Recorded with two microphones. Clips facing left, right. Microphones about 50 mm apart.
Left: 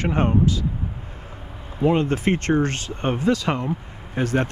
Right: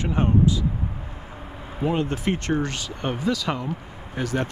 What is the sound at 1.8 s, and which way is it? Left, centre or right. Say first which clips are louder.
Speech: left 4 dB; left.